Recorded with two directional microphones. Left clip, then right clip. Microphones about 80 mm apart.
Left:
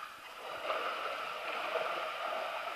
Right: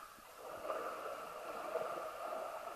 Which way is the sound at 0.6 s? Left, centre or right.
Left.